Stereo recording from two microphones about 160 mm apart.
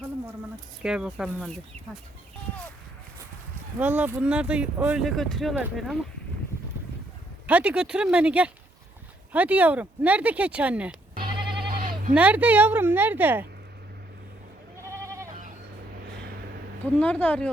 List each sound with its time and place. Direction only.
0.8 s speech: 5° right (ahead or behind)
3.8 s speech: 10° right (ahead or behind)
7.4 s speech: 10° right (ahead or behind)
11.2 s sheep: 30° right (ahead or behind)
11.7 s bleat: 60° right (ahead or behind)
12.1 s speech: 10° right (ahead or behind)
14.8 s goat: 15° right (ahead or behind)
17.0 s speech: 10° left (ahead or behind)